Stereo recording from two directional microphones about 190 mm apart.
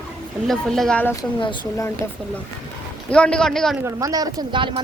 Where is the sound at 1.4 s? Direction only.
20° left (ahead or behind).